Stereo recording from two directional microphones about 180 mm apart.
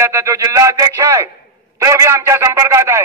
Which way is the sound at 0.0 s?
15° right (ahead or behind).